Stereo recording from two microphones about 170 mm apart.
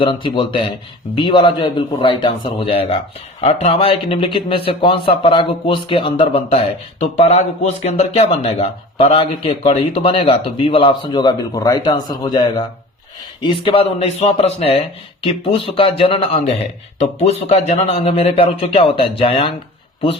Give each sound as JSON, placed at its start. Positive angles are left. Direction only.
{"t": 0.0, "sound": "a man's voice", "side_deg": 30}